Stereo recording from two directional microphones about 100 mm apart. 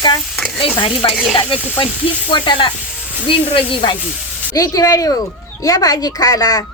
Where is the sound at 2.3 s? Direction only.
55° left (ahead or behind).